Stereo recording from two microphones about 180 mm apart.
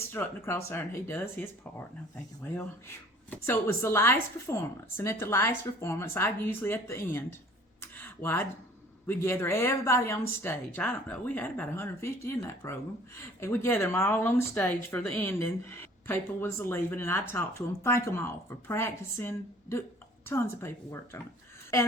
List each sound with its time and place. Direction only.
0.0 s speech: 15° left (ahead or behind)
7.8 s a sound: 10° left (ahead or behind)
9.0 s speech: 15° left (ahead or behind)